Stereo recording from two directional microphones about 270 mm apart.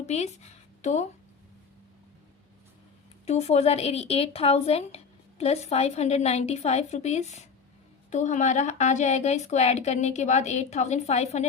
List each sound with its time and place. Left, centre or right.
0.0 s speech: left
3.2 s speech: left